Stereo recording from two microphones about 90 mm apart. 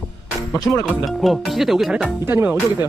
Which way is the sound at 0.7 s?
25° left (ahead or behind).